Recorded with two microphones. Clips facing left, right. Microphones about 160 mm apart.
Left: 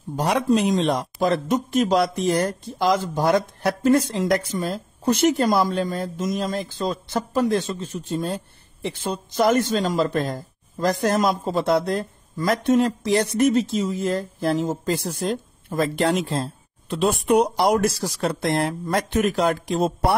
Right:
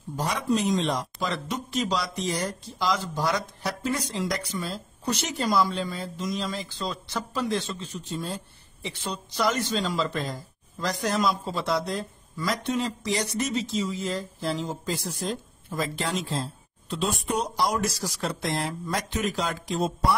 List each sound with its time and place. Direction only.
0.1 s speech: 60° left (ahead or behind)